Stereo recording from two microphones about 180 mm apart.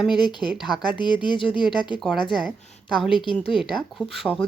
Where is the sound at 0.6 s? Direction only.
25° left (ahead or behind).